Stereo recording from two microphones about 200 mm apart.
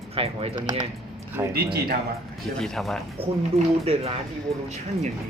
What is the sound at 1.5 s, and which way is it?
Speech, 50° right (ahead or behind).